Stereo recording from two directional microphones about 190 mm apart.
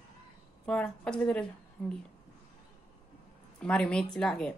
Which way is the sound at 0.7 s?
5° left (ahead or behind).